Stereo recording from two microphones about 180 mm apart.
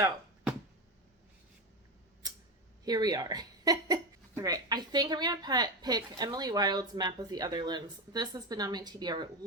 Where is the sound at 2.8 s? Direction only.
20° right (ahead or behind).